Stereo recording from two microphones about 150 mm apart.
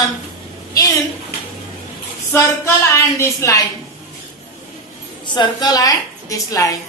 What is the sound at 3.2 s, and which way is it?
Speech, 20° left (ahead or behind).